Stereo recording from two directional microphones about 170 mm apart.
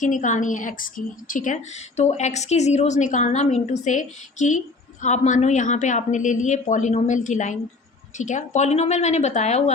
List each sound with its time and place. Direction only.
0.0 s a woman's voice: 45° left (ahead or behind)